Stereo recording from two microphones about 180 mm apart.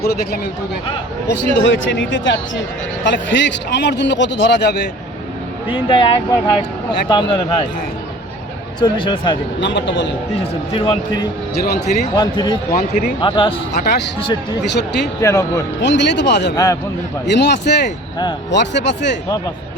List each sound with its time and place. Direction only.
0.0 s speech: 60° left (ahead or behind)
1.3 s a man's voice: 85° left
5.6 s speech: 30° left (ahead or behind)
8.8 s speech: 25° left (ahead or behind)
9.6 s a man's voice: 85° left
10.4 s speech: 30° left (ahead or behind)
13.7 s speech: 65° left (ahead or behind)
15.2 s speech: 15° left (ahead or behind)
15.8 s speech: 75° left (ahead or behind)